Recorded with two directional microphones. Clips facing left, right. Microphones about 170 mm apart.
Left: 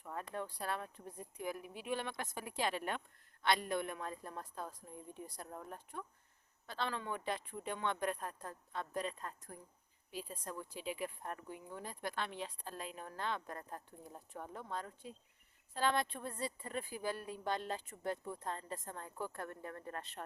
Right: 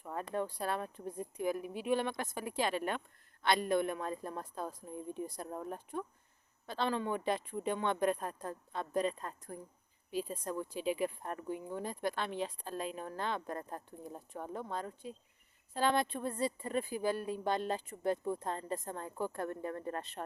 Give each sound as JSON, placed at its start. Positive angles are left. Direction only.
{"t": 0.0, "sound": "a sound", "side_deg": -30}
{"t": 0.4, "sound": "a woman's voice", "side_deg": -35}
{"t": 14.7, "sound": "speech", "side_deg": -25}
{"t": 15.7, "sound": "speech", "side_deg": -15}